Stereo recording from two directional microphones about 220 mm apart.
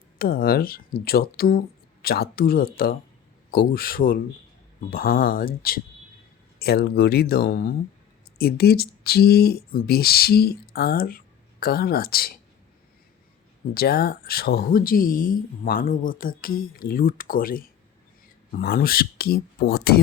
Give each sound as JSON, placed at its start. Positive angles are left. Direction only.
{"t": 0.2, "sound": "speech", "side_deg": 40}
{"t": 13.7, "sound": "speech", "side_deg": 45}